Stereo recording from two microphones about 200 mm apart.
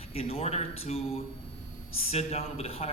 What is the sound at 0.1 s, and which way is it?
A man's voice, 30° left (ahead or behind).